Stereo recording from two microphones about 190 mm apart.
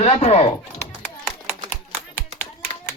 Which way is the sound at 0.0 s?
35° left (ahead or behind).